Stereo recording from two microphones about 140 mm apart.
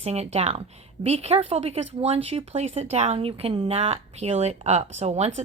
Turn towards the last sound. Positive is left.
turn(degrees=-50)  # may be behind; listen again after turning